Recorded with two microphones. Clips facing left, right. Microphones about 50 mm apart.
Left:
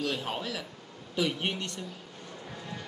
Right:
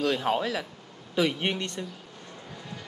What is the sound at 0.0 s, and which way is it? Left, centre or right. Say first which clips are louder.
Speech: right 7 dB; right.